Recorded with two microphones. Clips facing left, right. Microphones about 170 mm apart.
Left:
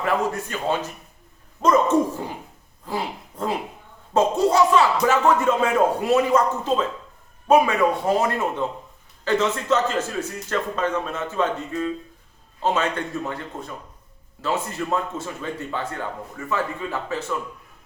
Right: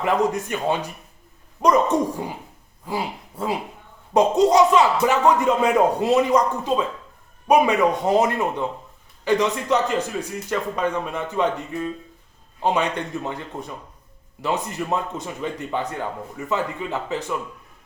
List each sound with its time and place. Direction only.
0.0 s speech: 20° right (ahead or behind)